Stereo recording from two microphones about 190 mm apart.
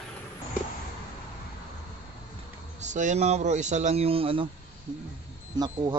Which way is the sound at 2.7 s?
40° right (ahead or behind).